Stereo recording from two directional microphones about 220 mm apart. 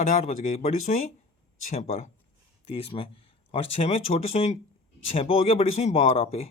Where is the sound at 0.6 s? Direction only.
35° left (ahead or behind).